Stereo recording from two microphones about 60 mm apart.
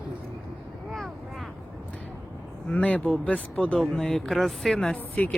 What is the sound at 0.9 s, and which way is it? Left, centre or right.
Vehicle, centre.